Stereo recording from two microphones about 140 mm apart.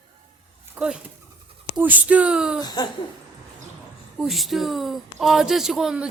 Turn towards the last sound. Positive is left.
turn(degrees=-5)  # may be behind; listen again after turning